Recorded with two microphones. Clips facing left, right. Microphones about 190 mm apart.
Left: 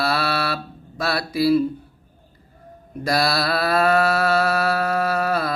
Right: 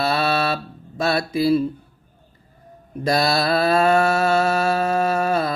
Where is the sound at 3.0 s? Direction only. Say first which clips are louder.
Right 2 dB; 25° right (ahead or behind).